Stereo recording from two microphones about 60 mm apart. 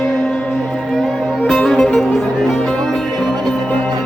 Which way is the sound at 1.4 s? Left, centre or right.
Centre.